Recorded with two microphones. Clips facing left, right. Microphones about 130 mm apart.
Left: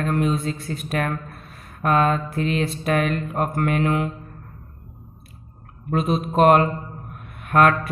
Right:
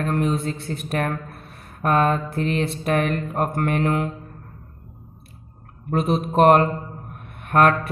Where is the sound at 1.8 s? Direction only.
40° right (ahead or behind).